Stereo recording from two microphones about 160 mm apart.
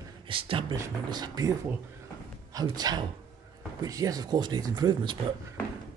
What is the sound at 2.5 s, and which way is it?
Speech, 25° right (ahead or behind).